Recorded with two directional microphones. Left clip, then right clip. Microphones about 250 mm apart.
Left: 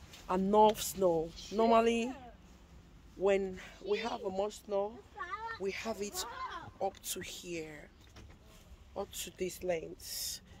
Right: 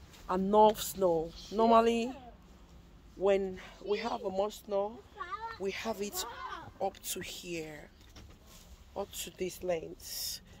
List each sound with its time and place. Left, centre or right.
0.3 s speech: centre
1.3 s speech: centre
1.6 s speech: centre
3.2 s speech: right
5.2 s a sound: centre
5.6 s a child's voice: right
8.9 s speech: right